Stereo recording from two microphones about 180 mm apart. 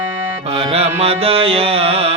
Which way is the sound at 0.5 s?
35° right (ahead or behind).